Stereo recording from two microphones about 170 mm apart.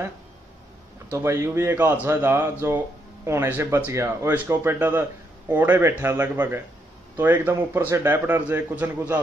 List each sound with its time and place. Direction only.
1.1 s speech: 15° right (ahead or behind)